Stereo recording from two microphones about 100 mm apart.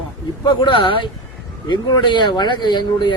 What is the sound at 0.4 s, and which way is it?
Speech, 55° left (ahead or behind).